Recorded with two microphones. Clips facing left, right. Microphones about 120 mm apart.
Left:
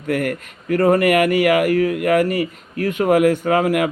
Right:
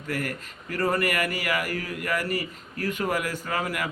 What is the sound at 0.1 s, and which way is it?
A man's voice, 55° left (ahead or behind).